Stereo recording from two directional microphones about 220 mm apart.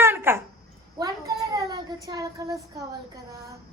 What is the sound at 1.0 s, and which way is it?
Child singing, 15° right (ahead or behind).